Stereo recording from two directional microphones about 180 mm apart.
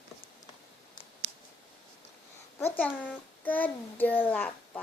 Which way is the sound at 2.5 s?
10° left (ahead or behind).